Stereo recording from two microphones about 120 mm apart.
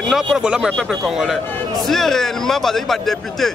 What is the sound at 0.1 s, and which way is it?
A man's voice, 5° right (ahead or behind).